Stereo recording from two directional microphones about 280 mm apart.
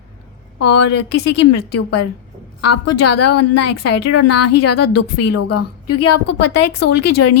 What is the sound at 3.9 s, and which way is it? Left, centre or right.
Speech, left.